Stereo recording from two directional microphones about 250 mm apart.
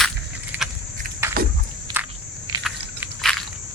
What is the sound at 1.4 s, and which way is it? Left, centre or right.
Walk, right.